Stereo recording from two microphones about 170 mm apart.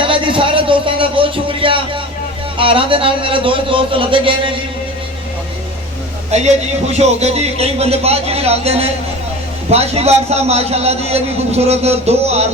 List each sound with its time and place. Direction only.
0.0 s a sound: 30° right (ahead or behind)
2.6 s a man's voice: 30° right (ahead or behind)
6.3 s a man's voice: 40° right (ahead or behind)